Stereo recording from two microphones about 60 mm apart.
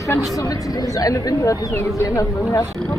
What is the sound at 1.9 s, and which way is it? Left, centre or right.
Speech, left.